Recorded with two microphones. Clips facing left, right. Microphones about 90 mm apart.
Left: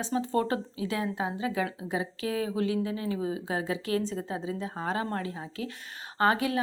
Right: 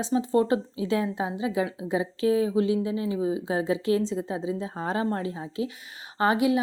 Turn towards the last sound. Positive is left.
turn(degrees=-15)  # may be behind; listen again after turning